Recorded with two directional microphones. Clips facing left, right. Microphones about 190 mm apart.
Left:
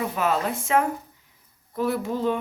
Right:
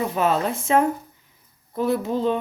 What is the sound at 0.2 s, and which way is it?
Speech, 25° right (ahead or behind).